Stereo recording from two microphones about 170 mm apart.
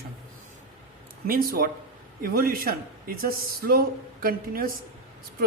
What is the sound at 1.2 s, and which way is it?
A man's voice, 60° right (ahead or behind).